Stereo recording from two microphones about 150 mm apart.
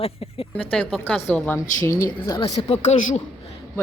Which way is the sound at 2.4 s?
40° left (ahead or behind).